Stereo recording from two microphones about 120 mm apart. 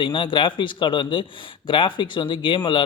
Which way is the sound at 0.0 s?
45° left (ahead or behind).